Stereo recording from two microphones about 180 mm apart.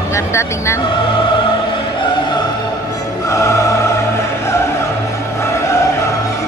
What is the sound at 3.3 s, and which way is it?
Music, 15° left (ahead or behind).